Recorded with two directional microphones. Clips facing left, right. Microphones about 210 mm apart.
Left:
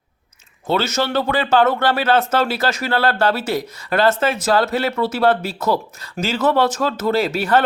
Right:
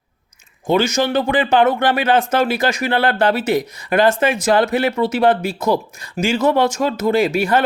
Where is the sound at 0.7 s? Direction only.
15° right (ahead or behind).